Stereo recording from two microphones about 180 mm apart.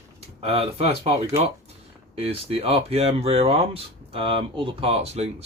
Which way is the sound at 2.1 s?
35° right (ahead or behind).